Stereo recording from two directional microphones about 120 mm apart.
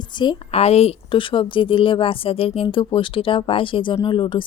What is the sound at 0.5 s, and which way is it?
A woman's voice, 60° left (ahead or behind).